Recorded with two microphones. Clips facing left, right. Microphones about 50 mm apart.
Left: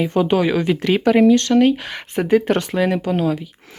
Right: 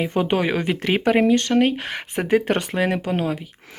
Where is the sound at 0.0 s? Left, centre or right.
Right.